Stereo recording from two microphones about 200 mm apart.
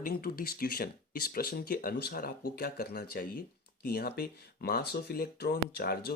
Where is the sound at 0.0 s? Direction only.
45° left (ahead or behind).